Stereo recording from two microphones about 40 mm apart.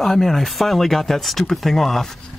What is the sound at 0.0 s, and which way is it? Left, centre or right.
Speech, centre.